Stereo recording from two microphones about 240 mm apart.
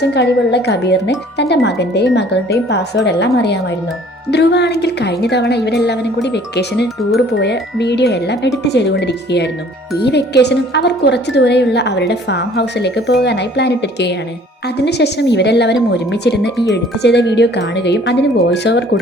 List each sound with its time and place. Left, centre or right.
0.1 s speech: left